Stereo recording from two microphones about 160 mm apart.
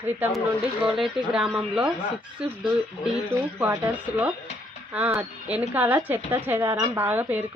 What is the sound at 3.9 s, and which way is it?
A woman's voice, 10° right (ahead or behind).